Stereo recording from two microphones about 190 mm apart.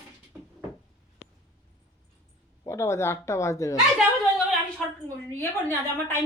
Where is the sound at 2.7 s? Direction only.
15° left (ahead or behind).